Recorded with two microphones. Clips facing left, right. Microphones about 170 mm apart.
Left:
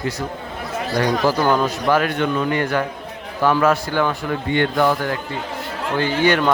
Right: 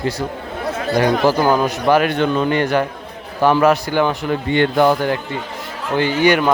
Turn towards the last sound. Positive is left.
turn(degrees=-10)  # may be behind; listen again after turning